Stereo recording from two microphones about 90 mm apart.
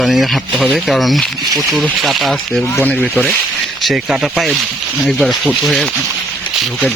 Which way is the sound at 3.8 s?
5° right (ahead or behind).